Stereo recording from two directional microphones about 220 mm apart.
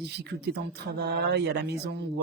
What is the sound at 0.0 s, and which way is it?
Speech, 50° right (ahead or behind).